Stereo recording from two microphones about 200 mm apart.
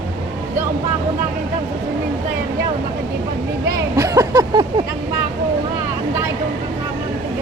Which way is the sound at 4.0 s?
20° right (ahead or behind).